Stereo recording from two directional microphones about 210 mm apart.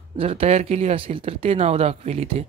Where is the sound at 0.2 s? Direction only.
25° right (ahead or behind).